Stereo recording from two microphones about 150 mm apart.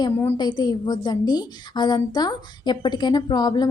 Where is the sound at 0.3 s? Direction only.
30° left (ahead or behind).